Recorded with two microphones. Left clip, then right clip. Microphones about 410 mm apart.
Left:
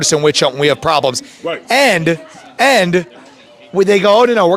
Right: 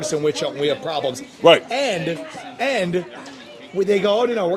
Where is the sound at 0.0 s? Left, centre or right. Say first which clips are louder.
Left 9 dB; left.